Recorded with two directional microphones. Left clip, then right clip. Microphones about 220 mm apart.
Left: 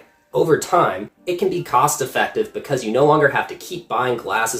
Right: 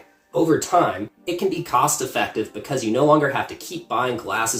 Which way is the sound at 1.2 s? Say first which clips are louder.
Left 3 dB; 15° left (ahead or behind).